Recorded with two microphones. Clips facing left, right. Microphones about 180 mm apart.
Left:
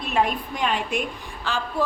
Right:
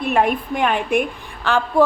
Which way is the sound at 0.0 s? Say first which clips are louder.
Right 5 dB; 55° right (ahead or behind).